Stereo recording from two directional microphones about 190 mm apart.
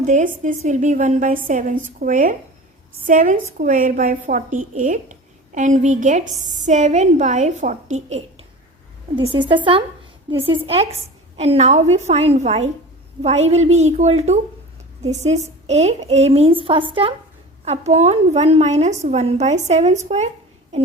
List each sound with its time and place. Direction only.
0.0 s a woman's voice: 40° right (ahead or behind)